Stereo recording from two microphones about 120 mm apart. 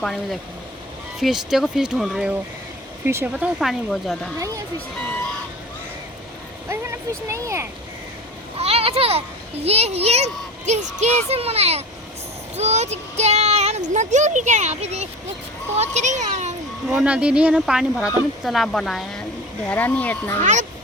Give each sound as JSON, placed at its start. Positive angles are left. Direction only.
{"t": 0.0, "sound": "speech", "side_deg": 5}
{"t": 3.0, "sound": "speech", "side_deg": -20}
{"t": 4.4, "sound": "speech", "side_deg": -30}
{"t": 6.7, "sound": "speech", "side_deg": -25}
{"t": 8.5, "sound": "a sound", "side_deg": -55}
{"t": 9.6, "sound": "a child's voice", "side_deg": -60}
{"t": 10.7, "sound": "speech", "side_deg": -75}
{"t": 11.3, "sound": "a child's voice", "side_deg": -60}
{"t": 15.8, "sound": "a child's voice", "side_deg": -80}
{"t": 16.9, "sound": "speech", "side_deg": -10}
{"t": 20.4, "sound": "speech", "side_deg": -90}